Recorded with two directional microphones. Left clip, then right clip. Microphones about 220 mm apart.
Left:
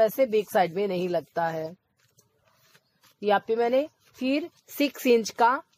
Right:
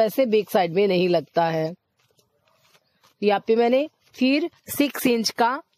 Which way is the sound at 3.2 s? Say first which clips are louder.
Right 4 dB; 45° right (ahead or behind).